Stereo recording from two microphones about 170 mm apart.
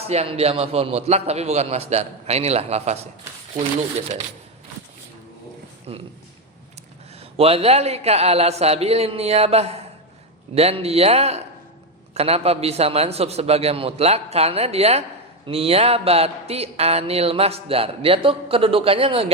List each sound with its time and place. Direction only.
0.1 s speech: 35° right (ahead or behind)
5.9 s speech: 35° right (ahead or behind)
7.2 s speech: 35° right (ahead or behind)